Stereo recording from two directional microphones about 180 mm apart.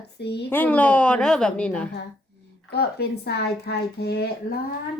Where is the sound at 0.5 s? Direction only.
10° left (ahead or behind).